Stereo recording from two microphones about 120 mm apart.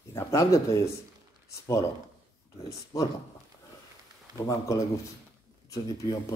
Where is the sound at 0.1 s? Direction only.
25° left (ahead or behind).